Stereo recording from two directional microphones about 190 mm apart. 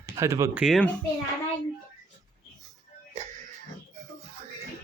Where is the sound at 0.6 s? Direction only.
Centre (ahead or behind).